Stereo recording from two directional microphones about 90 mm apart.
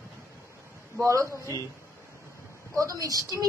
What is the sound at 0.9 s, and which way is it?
Speech, 35° right (ahead or behind).